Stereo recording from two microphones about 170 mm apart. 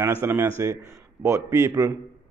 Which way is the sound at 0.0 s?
15° right (ahead or behind).